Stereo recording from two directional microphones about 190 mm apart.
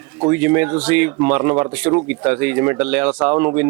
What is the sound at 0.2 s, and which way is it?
A man's voice, 10° right (ahead or behind).